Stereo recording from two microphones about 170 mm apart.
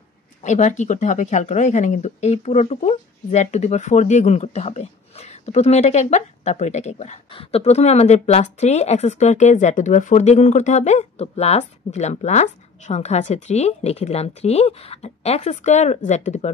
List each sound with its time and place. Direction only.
0.4 s speech: 45° left (ahead or behind)